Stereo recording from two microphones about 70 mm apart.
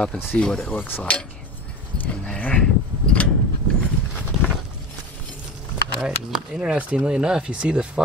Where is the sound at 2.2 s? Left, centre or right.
Centre.